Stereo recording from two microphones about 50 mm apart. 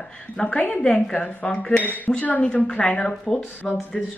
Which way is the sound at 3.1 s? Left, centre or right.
Centre.